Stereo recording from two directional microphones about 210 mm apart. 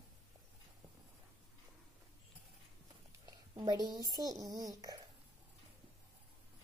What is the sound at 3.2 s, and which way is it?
A woman's voice, 20° right (ahead or behind).